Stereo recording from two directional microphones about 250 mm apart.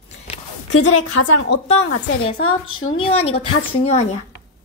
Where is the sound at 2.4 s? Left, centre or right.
Left.